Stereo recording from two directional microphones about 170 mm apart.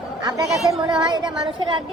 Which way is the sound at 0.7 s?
25° right (ahead or behind).